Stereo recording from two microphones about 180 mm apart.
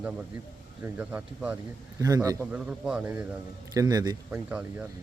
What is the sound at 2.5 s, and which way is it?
Speech, 5° right (ahead or behind).